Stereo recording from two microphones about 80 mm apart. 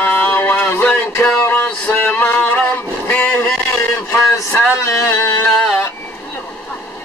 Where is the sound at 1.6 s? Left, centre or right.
Centre.